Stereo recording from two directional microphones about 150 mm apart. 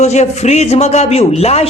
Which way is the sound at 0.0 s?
50° left (ahead or behind).